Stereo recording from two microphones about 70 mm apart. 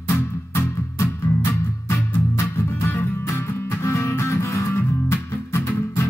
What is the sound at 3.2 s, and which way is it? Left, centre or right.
Music, left.